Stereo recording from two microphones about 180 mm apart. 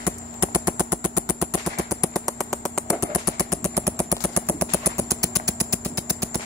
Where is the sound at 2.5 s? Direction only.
Centre (ahead or behind).